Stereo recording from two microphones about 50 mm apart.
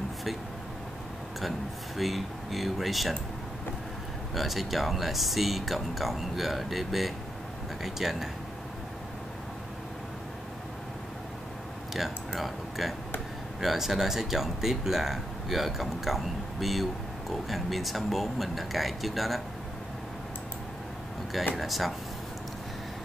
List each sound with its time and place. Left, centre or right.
2.0 s speech: centre
4.4 s speech: centre
11.9 s speech: centre
21.5 s speech: centre